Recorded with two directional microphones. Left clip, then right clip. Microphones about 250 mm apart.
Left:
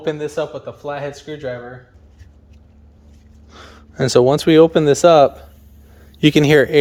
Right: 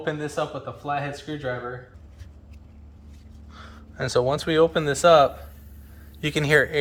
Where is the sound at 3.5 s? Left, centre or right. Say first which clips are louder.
Left 7 dB; left.